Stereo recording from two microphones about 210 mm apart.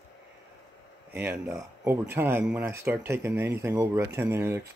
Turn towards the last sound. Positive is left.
turn(degrees=-10)  # may be behind; listen again after turning